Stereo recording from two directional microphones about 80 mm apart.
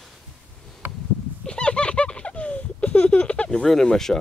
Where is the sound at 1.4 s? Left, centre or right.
Centre.